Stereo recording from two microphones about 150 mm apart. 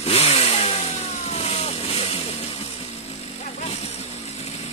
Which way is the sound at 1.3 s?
45° left (ahead or behind).